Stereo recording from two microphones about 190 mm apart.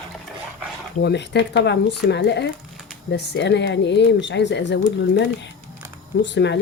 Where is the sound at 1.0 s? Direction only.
65° left (ahead or behind).